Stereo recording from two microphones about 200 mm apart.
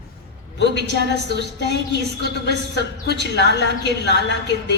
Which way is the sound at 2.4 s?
60° left (ahead or behind).